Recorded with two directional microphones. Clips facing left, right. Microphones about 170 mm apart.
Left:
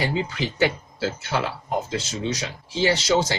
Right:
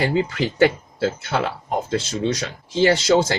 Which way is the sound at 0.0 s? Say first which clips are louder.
Right 5 dB; 50° right (ahead or behind).